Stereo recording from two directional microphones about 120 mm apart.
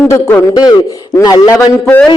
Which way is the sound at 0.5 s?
30° left (ahead or behind).